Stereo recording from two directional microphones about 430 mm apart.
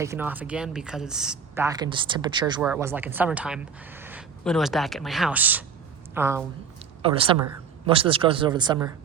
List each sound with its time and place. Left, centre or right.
0.0 s a woman's voice: centre